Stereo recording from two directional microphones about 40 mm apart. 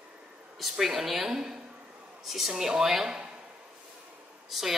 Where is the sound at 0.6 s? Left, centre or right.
Centre.